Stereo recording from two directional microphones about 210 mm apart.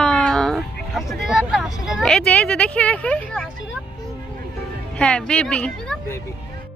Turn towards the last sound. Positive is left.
turn(degrees=5)  # may be behind; listen again after turning